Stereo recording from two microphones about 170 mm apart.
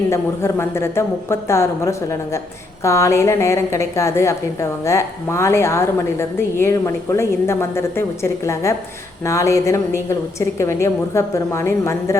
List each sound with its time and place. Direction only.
0.1 s a woman's voice: 15° left (ahead or behind)